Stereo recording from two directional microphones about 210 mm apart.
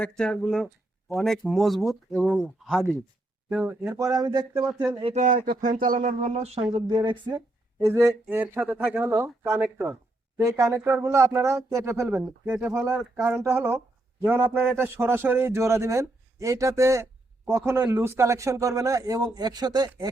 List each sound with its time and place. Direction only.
0.0 s speech: 5° left (ahead or behind); by 4.6 s 15° right (ahead or behind)
4.6 s speech: 5° right (ahead or behind)
4.9 s a man's voice: 20° right (ahead or behind)
5.1 s speech: 35° right (ahead or behind); by 19.9 s 20° right (ahead or behind)